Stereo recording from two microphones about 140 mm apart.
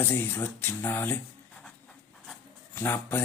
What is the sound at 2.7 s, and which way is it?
Speech, 15° left (ahead or behind).